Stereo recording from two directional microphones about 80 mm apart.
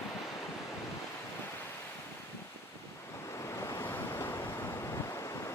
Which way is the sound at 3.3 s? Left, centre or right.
Left.